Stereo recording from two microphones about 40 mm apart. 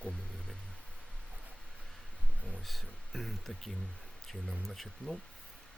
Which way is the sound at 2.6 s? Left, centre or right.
Centre.